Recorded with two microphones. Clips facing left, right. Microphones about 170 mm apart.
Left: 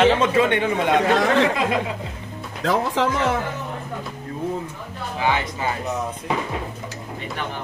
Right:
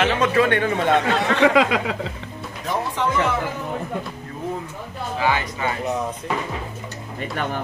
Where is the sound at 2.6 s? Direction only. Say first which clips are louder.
Left 4 dB; 90° left.